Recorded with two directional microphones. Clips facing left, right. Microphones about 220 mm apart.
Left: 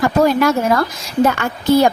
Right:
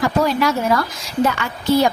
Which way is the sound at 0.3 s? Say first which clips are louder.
Left 3 dB; 50° left (ahead or behind).